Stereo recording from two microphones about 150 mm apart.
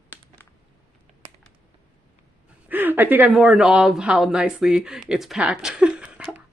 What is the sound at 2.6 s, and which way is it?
Speech, 10° right (ahead or behind).